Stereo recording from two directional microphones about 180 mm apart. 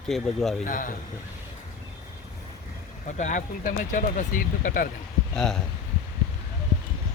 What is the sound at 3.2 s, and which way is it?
Speech, 45° left (ahead or behind).